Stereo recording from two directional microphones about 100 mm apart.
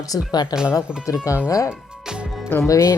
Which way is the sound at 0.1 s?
45° left (ahead or behind).